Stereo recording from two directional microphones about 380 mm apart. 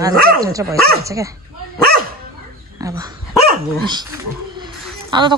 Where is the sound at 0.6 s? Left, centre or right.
Right.